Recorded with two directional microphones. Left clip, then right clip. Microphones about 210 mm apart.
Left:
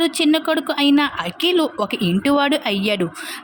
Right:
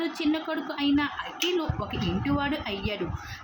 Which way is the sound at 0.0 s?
50° left (ahead or behind).